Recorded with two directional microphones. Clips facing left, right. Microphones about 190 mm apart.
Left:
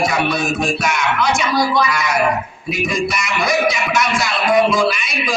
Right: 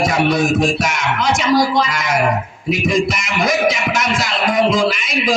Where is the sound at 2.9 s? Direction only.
50° right (ahead or behind).